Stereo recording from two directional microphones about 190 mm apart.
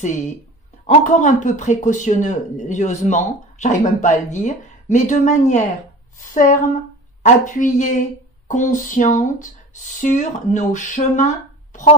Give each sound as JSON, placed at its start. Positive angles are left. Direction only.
{"t": 0.8, "sound": "speech", "side_deg": 40}